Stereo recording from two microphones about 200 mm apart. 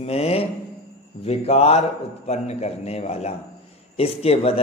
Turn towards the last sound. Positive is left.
turn(degrees=30)  # may be behind; listen again after turning